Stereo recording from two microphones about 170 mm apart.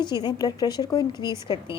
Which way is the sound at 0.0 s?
25° left (ahead or behind).